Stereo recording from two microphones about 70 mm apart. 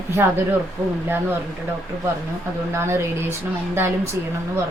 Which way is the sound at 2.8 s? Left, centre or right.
Right.